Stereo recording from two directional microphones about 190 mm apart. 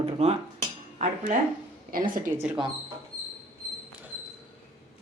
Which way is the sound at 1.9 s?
50° right (ahead or behind).